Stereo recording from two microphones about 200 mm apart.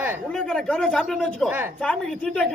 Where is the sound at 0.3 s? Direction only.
5° left (ahead or behind).